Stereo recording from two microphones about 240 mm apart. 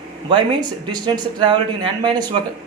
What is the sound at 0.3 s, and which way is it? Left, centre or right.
Speech, centre.